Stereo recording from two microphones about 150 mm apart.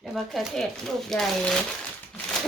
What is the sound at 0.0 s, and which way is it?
Speech, centre (ahead or behind).